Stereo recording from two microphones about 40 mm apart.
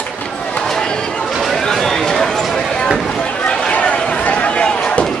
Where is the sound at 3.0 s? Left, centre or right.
Left.